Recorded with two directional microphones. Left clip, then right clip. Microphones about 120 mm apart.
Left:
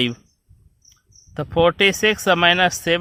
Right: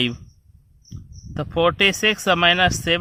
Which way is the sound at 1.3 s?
20° left (ahead or behind).